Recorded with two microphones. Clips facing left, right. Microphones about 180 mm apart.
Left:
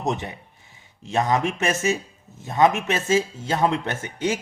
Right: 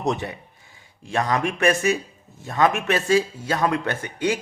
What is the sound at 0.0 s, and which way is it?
Speech, 20° left (ahead or behind).